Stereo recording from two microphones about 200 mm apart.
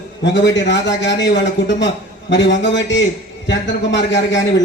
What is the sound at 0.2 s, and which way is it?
A man's voice, 65° left (ahead or behind).